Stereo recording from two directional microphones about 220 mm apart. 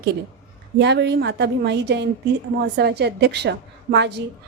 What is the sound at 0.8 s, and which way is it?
A woman's voice, 50° right (ahead or behind).